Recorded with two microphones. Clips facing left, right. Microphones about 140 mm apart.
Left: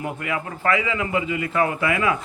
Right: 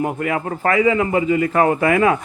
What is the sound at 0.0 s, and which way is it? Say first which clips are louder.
A man's voice: right 6 dB; 40° right (ahead or behind).